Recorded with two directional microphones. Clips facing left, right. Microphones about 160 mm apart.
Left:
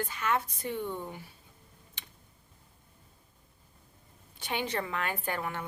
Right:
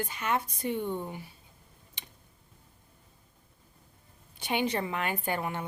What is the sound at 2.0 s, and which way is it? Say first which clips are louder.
Tick: right 1 dB; 15° right (ahead or behind).